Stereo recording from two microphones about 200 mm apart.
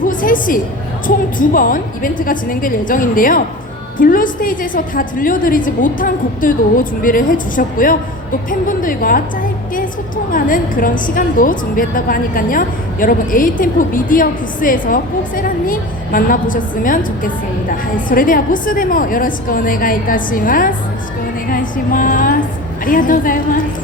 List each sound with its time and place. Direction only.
0.0 s music: 40° left (ahead or behind)
1.0 s a woman's voice: 45° left (ahead or behind)
10.3 s a woman's voice: 45° left (ahead or behind)